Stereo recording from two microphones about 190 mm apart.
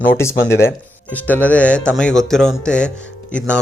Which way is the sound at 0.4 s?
15° left (ahead or behind).